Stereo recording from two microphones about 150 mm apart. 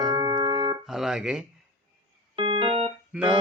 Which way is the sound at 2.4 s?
35° right (ahead or behind).